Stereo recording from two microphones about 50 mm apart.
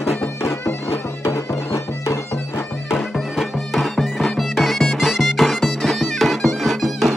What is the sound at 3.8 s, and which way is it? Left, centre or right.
Music, centre.